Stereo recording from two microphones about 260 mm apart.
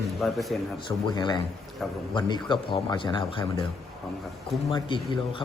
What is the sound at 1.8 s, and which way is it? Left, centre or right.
Speech, centre.